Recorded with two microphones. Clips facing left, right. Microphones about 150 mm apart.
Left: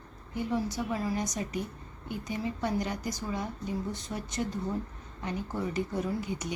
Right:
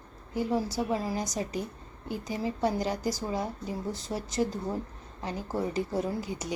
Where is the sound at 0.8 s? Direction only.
30° right (ahead or behind).